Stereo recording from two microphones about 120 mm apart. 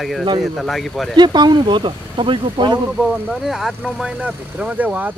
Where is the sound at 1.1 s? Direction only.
40° right (ahead or behind).